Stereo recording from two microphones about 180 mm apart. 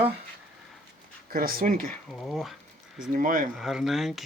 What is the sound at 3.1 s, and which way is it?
Speech, 50° right (ahead or behind).